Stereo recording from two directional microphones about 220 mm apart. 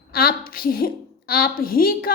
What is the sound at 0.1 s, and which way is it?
A woman's voice, 45° left (ahead or behind).